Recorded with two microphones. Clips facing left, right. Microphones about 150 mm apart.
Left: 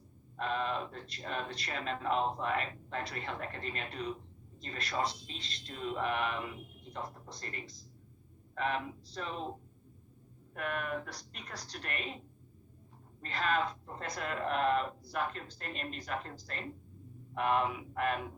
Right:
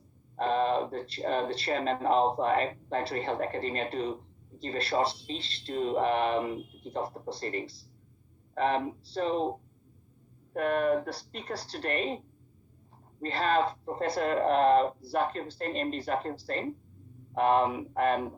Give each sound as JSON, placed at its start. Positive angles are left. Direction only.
{"t": 0.3, "sound": "speech", "side_deg": -35}
{"t": 13.2, "sound": "speech", "side_deg": -30}